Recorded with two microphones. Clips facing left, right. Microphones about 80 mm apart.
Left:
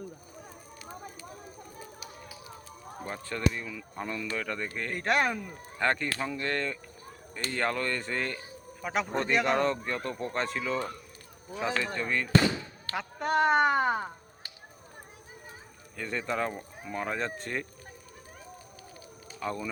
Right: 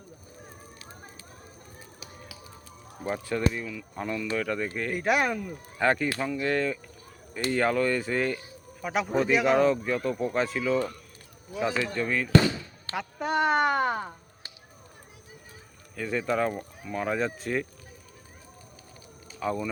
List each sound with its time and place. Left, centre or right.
3.0 s speech: centre
3.7 s speech: centre
5.8 s speech: centre
16.0 s speech: centre
19.4 s speech: centre